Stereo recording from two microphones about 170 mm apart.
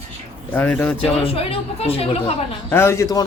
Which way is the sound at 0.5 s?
10° left (ahead or behind).